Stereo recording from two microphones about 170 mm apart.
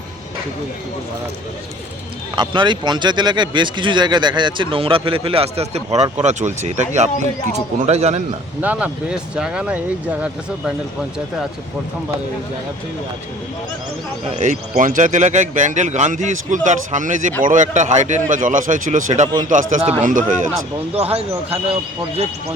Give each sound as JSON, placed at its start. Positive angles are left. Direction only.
{"t": 2.3, "sound": "speech", "side_deg": -30}
{"t": 8.6, "sound": "speech", "side_deg": -10}
{"t": 14.3, "sound": "speech", "side_deg": -45}
{"t": 20.9, "sound": "speech", "side_deg": -35}